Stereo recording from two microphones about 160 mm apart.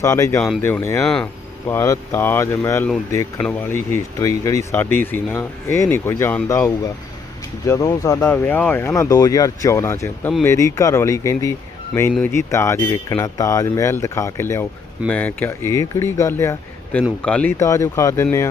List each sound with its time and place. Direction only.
0.0 s speech: 20° left (ahead or behind)
1.0 s speech: 5° left (ahead or behind)
1.6 s speech: 15° left (ahead or behind)
17.6 s speech: 20° left (ahead or behind)